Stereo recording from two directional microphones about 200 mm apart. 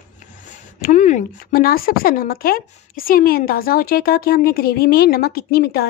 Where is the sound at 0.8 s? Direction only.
40° left (ahead or behind).